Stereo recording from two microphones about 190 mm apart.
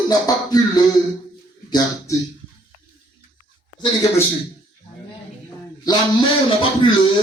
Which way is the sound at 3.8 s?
20° left (ahead or behind).